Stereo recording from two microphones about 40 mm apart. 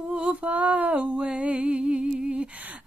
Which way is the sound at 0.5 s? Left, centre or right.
Right.